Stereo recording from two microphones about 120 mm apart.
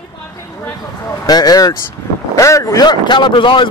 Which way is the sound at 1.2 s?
30° left (ahead or behind).